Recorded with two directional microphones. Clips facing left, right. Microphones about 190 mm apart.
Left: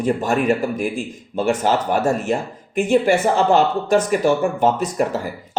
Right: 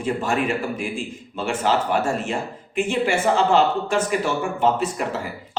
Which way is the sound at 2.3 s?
40° left (ahead or behind).